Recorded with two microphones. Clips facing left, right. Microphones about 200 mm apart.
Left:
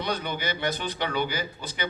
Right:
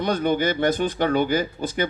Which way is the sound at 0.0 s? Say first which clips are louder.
Right 9 dB; 50° right (ahead or behind).